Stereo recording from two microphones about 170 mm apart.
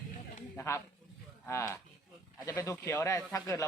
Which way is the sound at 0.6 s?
20° left (ahead or behind).